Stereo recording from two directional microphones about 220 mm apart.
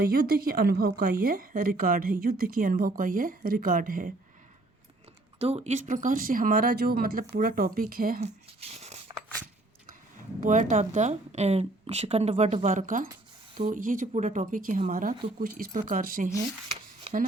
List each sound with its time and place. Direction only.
0.0 s a woman's voice: 40° right (ahead or behind)
5.4 s a woman's voice: 30° right (ahead or behind)
8.6 s a sound: 30° right (ahead or behind)
10.4 s a woman's voice: 35° right (ahead or behind)
17.0 s shuffling cards: 30° right (ahead or behind)